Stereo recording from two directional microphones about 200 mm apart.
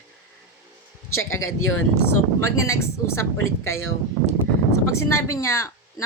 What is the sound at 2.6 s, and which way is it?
Speech, 15° left (ahead or behind).